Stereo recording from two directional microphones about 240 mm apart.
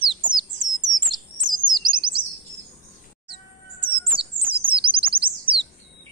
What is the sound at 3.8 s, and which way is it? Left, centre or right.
Chirp, right.